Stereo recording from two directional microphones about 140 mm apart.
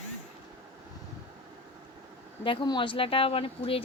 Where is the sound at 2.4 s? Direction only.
35° left (ahead or behind).